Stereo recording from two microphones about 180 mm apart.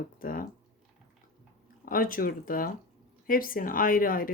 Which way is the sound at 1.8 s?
50° left (ahead or behind).